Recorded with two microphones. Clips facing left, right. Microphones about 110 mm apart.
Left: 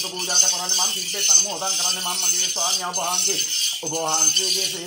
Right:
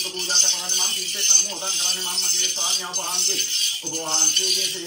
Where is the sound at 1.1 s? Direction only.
50° left (ahead or behind).